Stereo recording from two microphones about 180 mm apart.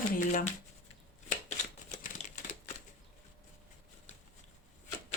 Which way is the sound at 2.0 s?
45° left (ahead or behind).